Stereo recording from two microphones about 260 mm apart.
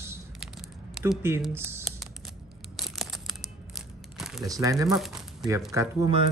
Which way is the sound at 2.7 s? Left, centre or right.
Centre.